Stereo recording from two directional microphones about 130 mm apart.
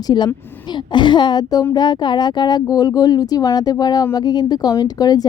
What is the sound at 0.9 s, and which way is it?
Speech, 35° left (ahead or behind).